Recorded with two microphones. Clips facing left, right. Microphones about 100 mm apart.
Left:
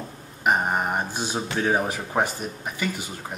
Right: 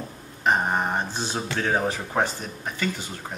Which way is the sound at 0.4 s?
10° left (ahead or behind).